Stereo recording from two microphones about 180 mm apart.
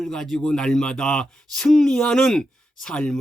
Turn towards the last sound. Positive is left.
turn(degrees=5)  # may be behind; listen again after turning